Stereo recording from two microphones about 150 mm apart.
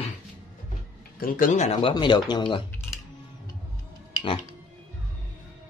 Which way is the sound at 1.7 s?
30° left (ahead or behind).